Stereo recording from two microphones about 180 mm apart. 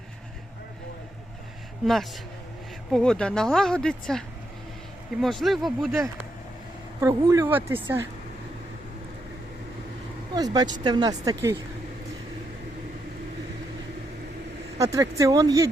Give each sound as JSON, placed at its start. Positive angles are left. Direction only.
{"t": 1.8, "sound": "speech", "side_deg": 0}
{"t": 5.2, "sound": "speech", "side_deg": 0}
{"t": 7.0, "sound": "speech", "side_deg": -15}
{"t": 10.3, "sound": "speech", "side_deg": -20}
{"t": 14.8, "sound": "speech", "side_deg": -20}